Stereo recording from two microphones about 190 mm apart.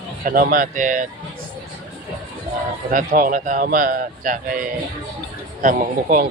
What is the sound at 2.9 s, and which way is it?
Speech, 45° right (ahead or behind).